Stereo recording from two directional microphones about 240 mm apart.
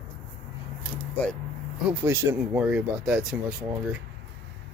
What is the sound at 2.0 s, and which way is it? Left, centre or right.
Speech, centre.